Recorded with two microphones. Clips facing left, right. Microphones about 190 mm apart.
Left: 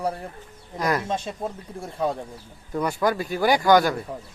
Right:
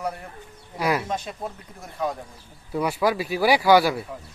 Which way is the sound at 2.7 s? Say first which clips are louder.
Even; 5° right (ahead or behind).